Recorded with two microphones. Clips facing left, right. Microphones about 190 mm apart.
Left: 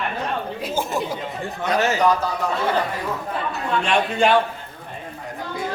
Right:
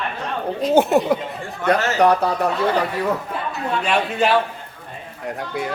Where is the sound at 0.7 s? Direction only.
65° right (ahead or behind).